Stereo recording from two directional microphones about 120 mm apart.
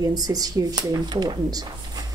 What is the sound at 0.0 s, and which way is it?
Speech, 30° right (ahead or behind).